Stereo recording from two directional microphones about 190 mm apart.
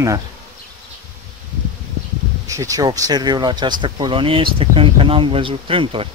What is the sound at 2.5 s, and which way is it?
Speech, 15° right (ahead or behind).